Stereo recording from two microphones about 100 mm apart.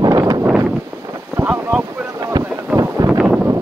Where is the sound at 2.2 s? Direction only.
40° right (ahead or behind).